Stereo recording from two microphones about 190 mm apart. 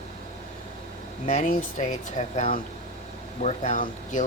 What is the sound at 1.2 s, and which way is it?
Speech, 40° left (ahead or behind).